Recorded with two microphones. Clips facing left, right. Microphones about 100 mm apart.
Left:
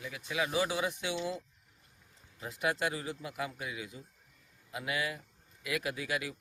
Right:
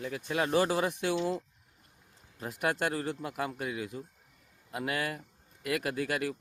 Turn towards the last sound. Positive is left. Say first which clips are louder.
# right 4 dB
turn(degrees=-55)  # may be behind; listen again after turning